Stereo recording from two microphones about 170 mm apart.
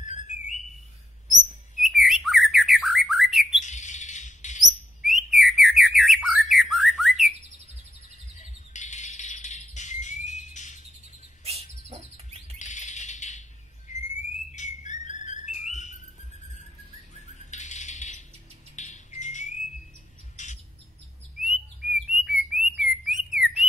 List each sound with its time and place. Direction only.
0.0 s a sound: 45° left (ahead or behind)
1.8 s bird: centre (ahead or behind)
3.6 s chirp: 45° left (ahead or behind)
5.0 s bird: centre (ahead or behind)
8.4 s squawk: 45° left (ahead or behind)
11.4 s bird: 40° right (ahead or behind)
12.5 s a sound: 45° left (ahead or behind)
13.8 s bird: 45° left (ahead or behind)
17.4 s bird: 45° left (ahead or behind)
18.8 s music: 45° left (ahead or behind)
20.4 s bird: 45° left (ahead or behind)
21.4 s bird: 5° right (ahead or behind)